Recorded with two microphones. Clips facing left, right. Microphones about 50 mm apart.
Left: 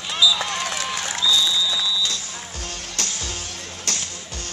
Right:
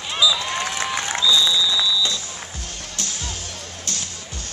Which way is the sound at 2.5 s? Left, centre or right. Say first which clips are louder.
Left 1 dB; left.